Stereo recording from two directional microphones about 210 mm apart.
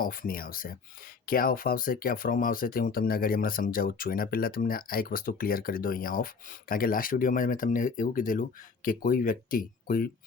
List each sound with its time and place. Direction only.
0.0 s speech: 45° left (ahead or behind)